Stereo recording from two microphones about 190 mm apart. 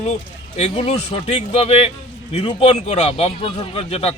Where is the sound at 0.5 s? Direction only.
35° left (ahead or behind).